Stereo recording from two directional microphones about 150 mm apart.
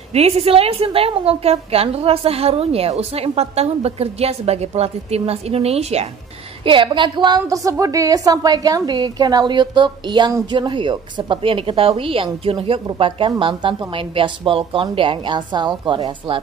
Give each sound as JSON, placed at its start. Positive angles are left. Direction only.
{"t": 0.1, "sound": "a woman's voice", "side_deg": -40}
{"t": 6.6, "sound": "a woman's voice", "side_deg": -35}